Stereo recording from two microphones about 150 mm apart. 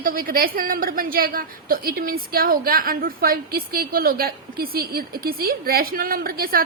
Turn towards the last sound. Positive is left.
turn(degrees=-80)